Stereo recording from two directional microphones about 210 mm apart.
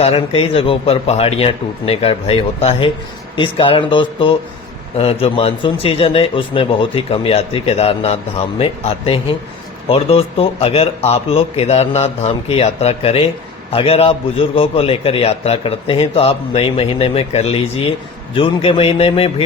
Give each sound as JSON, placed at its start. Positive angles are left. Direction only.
{"t": 0.0, "sound": "a man's voice", "side_deg": 30}